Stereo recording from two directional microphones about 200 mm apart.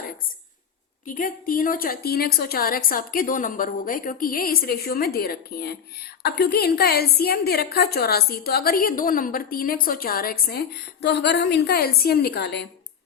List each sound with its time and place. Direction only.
1.0 s a woman's voice: 40° left (ahead or behind)
11.0 s a woman's voice: 60° left (ahead or behind)